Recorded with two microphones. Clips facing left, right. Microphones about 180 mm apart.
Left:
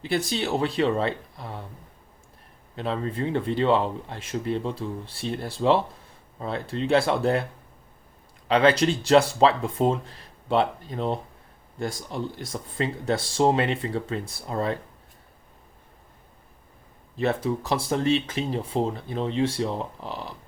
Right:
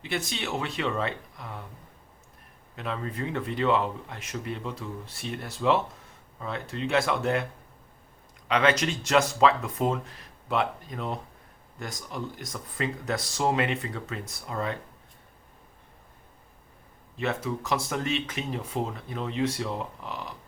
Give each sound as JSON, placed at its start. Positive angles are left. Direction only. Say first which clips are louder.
{"t": 0.0, "sound": "speech", "louder": "left 6 dB", "side_deg": 35}
{"t": 2.7, "sound": "speech", "louder": "left 5 dB", "side_deg": 30}
{"t": 8.4, "sound": "speech", "louder": "left 5 dB", "side_deg": 30}
{"t": 17.2, "sound": "speech", "louder": "left 5 dB", "side_deg": 35}